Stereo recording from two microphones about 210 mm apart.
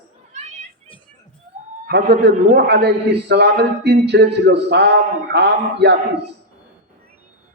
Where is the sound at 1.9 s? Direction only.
50° right (ahead or behind).